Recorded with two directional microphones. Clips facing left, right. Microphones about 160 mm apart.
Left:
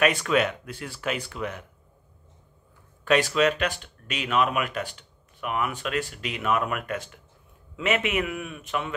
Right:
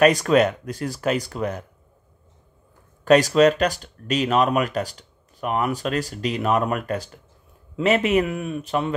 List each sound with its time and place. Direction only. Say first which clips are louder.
0.0 s speech: right 6 dB; 40° right (ahead or behind)
3.1 s speech: right 7 dB; 40° right (ahead or behind)